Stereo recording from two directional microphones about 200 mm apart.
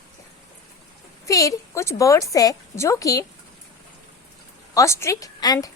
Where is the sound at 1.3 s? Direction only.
15° left (ahead or behind).